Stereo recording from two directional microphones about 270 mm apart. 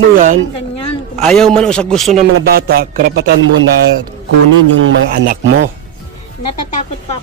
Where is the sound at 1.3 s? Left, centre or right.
Centre.